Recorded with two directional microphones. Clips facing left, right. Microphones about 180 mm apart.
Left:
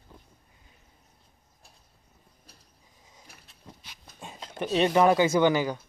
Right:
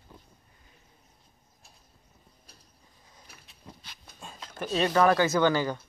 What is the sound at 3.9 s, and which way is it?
Speech, 15° left (ahead or behind).